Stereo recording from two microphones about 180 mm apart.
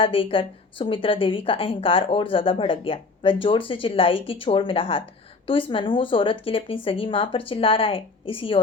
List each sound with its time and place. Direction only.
0.0 s a woman's voice: 30° left (ahead or behind)